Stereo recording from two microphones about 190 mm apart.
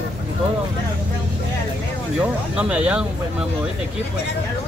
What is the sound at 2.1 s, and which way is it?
Speech, 5° right (ahead or behind).